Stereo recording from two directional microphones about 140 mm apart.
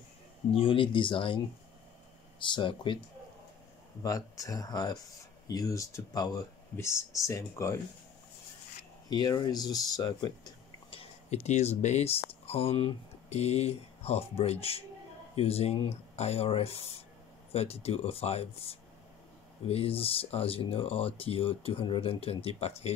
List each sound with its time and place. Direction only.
0.6 s speech: 40° left (ahead or behind)
4.0 s speech: 25° left (ahead or behind)
9.1 s speech: 30° left (ahead or behind); by 22.9 s 45° left (ahead or behind)